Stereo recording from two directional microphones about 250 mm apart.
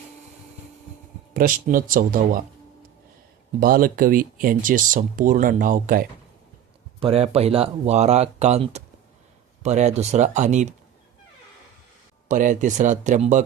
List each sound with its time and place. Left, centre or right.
1.3 s speech: right
3.6 s speech: right
12.3 s speech: right